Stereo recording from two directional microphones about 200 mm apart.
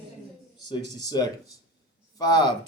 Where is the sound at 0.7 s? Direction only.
20° left (ahead or behind).